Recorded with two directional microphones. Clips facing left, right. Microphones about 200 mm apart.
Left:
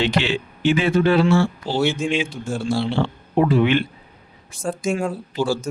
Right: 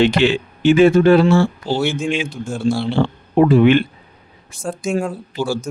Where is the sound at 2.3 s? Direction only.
Centre (ahead or behind).